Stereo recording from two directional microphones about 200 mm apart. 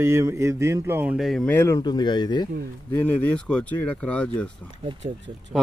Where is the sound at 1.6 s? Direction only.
15° left (ahead or behind).